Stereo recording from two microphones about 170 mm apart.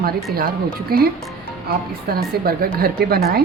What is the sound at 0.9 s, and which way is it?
Speech, 60° right (ahead or behind).